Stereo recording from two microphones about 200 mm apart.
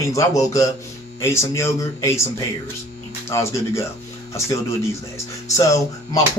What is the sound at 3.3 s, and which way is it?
Speech, 15° left (ahead or behind).